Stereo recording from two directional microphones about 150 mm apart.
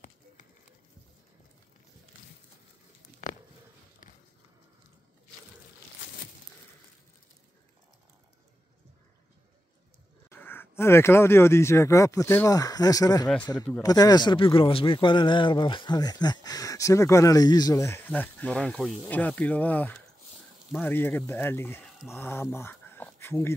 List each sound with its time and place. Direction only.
10.3 s speech: 15° left (ahead or behind)